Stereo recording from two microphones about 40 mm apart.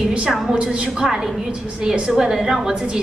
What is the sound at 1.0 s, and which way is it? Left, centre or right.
A woman's voice, centre.